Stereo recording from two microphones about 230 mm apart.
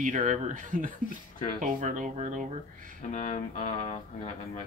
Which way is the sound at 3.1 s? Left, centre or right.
Left.